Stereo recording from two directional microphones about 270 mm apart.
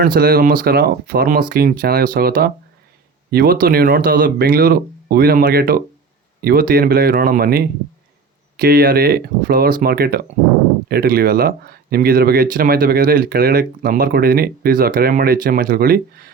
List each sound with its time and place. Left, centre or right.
0.0 s speech: right